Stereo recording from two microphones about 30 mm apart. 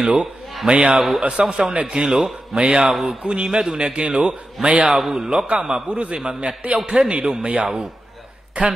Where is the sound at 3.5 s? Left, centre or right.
Centre.